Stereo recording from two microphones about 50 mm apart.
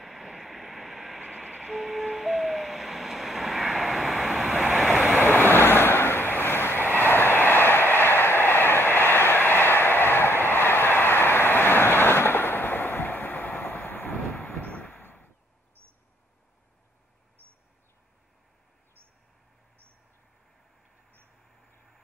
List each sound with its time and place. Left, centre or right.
0.0 s vehicle: centre
5.2 s vehicle: left